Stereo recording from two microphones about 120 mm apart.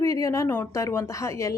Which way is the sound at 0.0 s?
25° left (ahead or behind).